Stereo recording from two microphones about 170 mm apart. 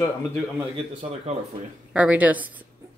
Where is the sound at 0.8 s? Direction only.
35° right (ahead or behind).